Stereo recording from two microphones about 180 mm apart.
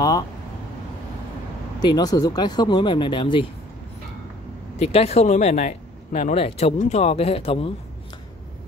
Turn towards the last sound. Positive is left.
turn(degrees=35)  # may be behind; listen again after turning